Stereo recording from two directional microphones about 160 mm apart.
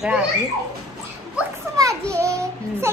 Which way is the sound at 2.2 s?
15° right (ahead or behind).